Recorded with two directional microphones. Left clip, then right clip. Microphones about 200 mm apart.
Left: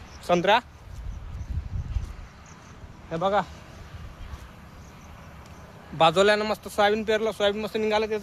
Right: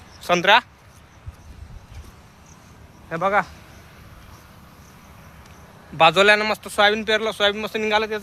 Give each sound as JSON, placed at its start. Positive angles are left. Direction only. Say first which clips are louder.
{"t": 0.2, "sound": "speech", "louder": "right 5 dB", "side_deg": 0}
{"t": 3.1, "sound": "speech", "louder": "right 4 dB", "side_deg": -20}
{"t": 6.0, "sound": "a man's voice", "louder": "right 5 dB", "side_deg": -15}